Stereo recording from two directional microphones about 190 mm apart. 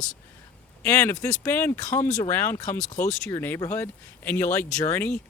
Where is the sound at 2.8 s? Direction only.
40° left (ahead or behind).